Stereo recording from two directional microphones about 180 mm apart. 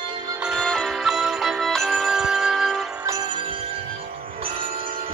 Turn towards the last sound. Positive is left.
turn(degrees=-20)  # may be behind; listen again after turning